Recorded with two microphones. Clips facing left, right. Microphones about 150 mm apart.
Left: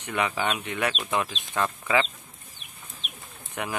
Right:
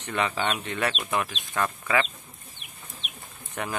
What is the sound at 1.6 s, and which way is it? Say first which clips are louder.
Speech: left 1 dB; 15° left (ahead or behind).